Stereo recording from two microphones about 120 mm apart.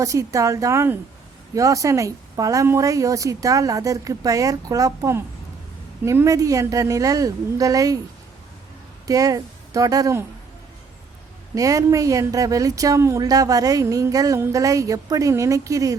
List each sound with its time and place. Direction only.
0.0 s speech: 25° right (ahead or behind)
9.0 s speech: 30° right (ahead or behind)
11.5 s speech: 30° right (ahead or behind)